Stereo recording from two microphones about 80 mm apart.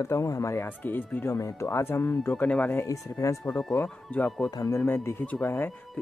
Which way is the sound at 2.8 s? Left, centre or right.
Left.